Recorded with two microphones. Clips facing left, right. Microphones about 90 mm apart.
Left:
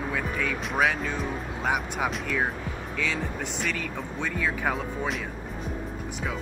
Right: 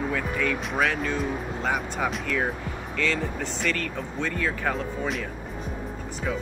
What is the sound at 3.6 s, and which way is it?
Speech, 5° left (ahead or behind).